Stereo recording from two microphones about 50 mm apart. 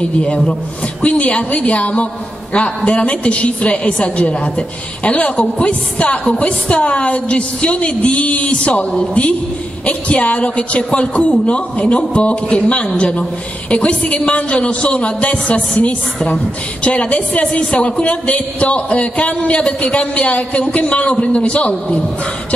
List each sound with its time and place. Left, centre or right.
1.0 s a man's voice: left